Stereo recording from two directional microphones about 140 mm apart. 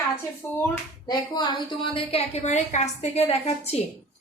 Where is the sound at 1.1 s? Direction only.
30° left (ahead or behind).